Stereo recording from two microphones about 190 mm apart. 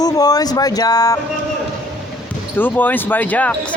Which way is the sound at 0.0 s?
20° left (ahead or behind).